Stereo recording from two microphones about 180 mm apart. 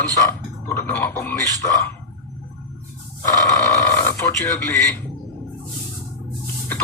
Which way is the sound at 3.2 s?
15° left (ahead or behind).